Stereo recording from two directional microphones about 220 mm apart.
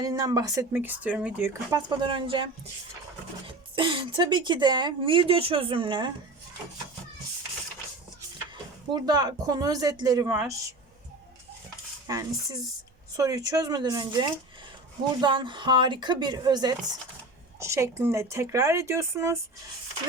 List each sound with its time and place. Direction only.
0.0 s speech: 15° right (ahead or behind)
2.0 s speech: 20° right (ahead or behind)
8.9 s speech: 20° right (ahead or behind)
12.0 s speech: 15° right (ahead or behind)